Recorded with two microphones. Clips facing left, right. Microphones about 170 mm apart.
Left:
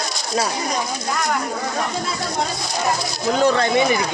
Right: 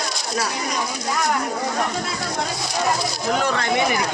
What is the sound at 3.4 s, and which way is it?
Speech, 25° left (ahead or behind).